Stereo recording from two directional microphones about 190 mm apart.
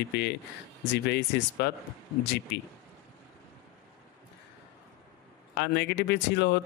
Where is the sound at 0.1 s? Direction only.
60° left (ahead or behind).